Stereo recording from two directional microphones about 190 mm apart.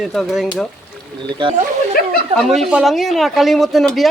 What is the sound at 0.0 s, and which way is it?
Speech, centre (ahead or behind).